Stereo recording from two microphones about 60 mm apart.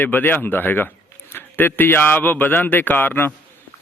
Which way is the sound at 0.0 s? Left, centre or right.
Left.